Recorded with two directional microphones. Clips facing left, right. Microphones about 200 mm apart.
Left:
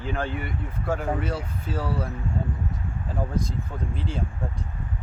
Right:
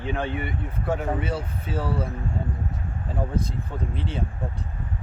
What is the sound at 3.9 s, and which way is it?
Speech, centre (ahead or behind).